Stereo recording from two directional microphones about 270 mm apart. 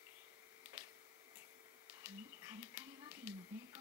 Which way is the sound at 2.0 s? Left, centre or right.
Centre.